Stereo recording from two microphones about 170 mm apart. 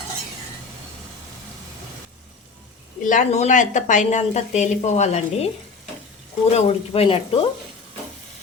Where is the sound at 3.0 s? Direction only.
45° left (ahead or behind).